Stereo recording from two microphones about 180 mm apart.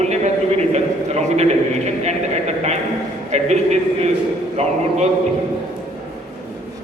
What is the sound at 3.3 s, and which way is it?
A man's voice, 40° right (ahead or behind).